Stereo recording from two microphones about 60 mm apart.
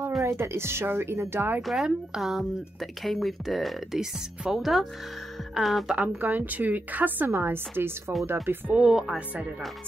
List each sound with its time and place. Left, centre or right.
0.2 s speech: right
1.6 s speech: centre
5.9 s a woman's voice: right
7.2 s speech: right
8.7 s speech: centre